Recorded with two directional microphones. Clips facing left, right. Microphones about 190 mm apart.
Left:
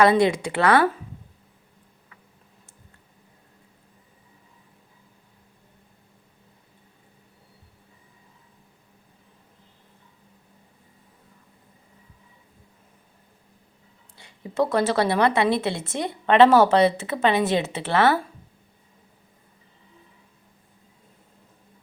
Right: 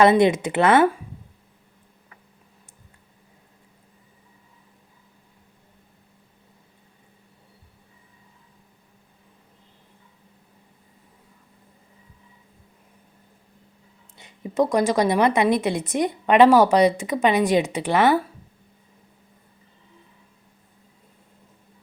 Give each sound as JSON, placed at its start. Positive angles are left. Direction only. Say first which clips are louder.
{"t": 0.0, "sound": "speech", "louder": "right 2 dB", "side_deg": -20}
{"t": 14.2, "sound": "a woman's voice", "louder": "right 2 dB", "side_deg": -20}